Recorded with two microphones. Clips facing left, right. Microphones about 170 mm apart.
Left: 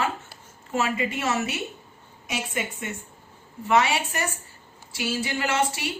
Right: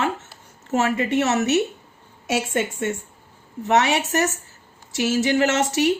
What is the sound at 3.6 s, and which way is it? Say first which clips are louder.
Speech: right 3 dB; 75° right (ahead or behind).